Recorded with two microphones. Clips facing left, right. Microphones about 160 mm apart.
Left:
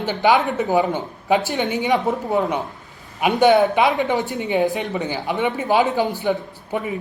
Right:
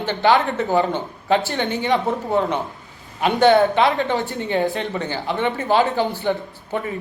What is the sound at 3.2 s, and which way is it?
Speech, 10° left (ahead or behind).